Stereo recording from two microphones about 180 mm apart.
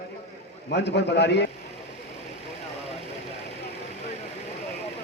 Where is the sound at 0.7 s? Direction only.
70° left (ahead or behind).